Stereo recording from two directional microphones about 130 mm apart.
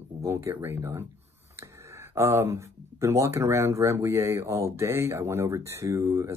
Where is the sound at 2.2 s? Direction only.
20° right (ahead or behind).